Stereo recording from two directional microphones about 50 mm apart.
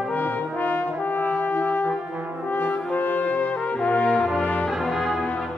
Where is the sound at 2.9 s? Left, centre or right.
Left.